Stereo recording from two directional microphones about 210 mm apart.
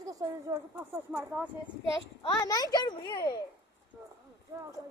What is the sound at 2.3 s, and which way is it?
A child's voice, 15° left (ahead or behind).